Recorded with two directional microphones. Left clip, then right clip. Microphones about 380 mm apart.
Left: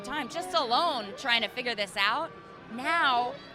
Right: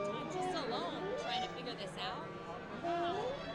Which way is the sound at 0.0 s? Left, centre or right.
Left.